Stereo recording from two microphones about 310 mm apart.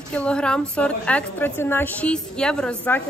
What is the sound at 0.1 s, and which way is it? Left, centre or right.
Speech, centre.